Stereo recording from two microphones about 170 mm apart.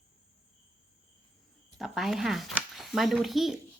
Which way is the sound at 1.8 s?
Centre (ahead or behind).